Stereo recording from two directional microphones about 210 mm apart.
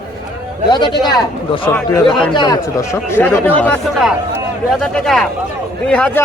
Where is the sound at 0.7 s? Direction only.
20° left (ahead or behind).